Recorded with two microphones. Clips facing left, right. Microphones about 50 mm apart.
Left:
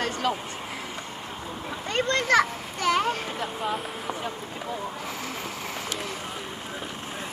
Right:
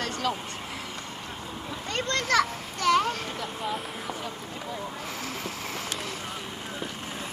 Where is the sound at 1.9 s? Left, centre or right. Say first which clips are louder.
Left 4 dB; centre.